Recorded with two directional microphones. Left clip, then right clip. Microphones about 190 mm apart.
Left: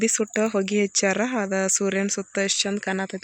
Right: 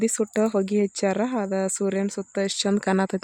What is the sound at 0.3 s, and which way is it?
Speech, 10° right (ahead or behind).